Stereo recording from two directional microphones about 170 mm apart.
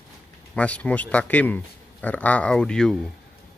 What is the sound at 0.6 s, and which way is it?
Speech, 5° left (ahead or behind).